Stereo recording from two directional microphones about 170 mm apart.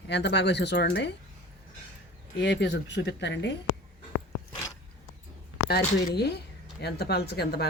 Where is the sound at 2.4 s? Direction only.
90° left.